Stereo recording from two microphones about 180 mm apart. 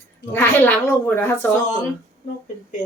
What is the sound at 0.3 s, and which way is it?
Speech, 10° left (ahead or behind).